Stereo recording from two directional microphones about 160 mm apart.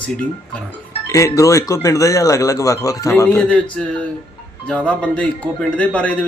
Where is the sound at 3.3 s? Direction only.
10° left (ahead or behind).